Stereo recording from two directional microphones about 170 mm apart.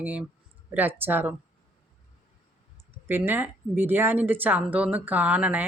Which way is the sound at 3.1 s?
10° right (ahead or behind).